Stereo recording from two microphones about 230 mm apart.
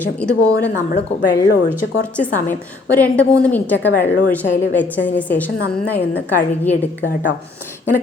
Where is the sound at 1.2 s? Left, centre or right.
Left.